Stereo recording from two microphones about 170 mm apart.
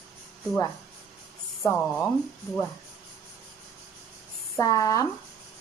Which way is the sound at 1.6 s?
10° left (ahead or behind).